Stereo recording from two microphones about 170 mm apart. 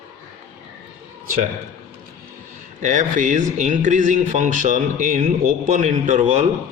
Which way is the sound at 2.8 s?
45° right (ahead or behind).